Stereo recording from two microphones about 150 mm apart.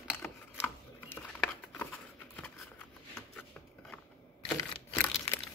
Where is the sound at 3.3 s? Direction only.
5° left (ahead or behind).